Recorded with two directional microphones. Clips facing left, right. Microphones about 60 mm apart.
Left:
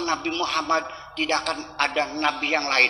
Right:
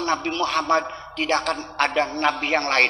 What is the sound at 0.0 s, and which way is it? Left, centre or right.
A man's voice, right.